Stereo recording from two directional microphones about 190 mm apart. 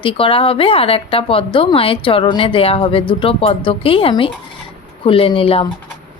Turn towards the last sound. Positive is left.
turn(degrees=30)  # may be behind; listen again after turning